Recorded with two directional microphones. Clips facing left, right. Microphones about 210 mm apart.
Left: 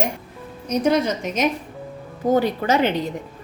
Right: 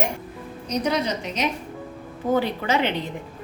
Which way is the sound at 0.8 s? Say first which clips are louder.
Left 5 dB; 50° left (ahead or behind).